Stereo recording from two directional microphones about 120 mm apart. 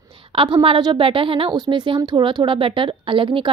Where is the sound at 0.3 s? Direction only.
45° right (ahead or behind).